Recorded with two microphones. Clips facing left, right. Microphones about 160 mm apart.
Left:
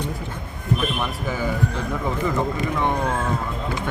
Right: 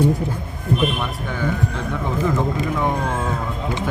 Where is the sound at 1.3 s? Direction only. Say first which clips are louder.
Right 1 dB; 5° left (ahead or behind).